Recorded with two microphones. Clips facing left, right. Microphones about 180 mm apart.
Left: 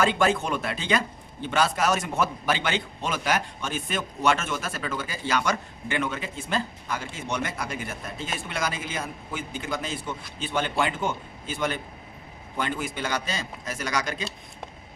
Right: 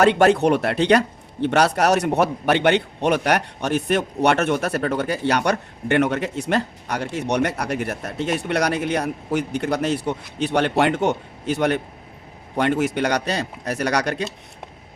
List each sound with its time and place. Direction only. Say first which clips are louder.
0.0 s speech: right 8 dB; 70° right (ahead or behind)